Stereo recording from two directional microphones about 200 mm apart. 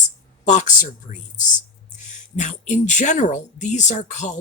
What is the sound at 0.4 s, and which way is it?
Speech, 35° left (ahead or behind).